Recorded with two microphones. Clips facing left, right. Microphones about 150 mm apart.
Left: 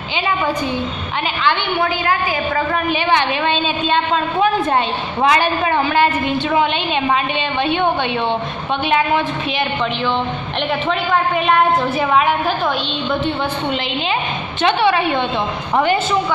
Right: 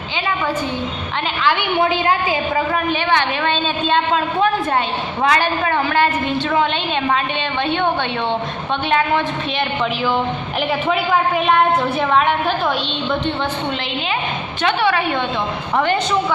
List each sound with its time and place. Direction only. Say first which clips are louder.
1.8 s a woman's voice: right 1 dB; 20° right (ahead or behind)
3.1 s a woman's voice: left 2 dB; 15° left (ahead or behind)
3.9 s a woman's voice: right 1 dB; centre (ahead or behind)
5.2 s a woman's voice: left 2 dB; 15° left (ahead or behind)
7.6 s a woman's voice: left 2 dB; 10° left (ahead or behind)
10.7 s a woman's voice: even; 5° right (ahead or behind)
14.6 s a woman's voice: left 3 dB; 25° left (ahead or behind)
15.7 s a woman's voice: left 2 dB; 10° left (ahead or behind)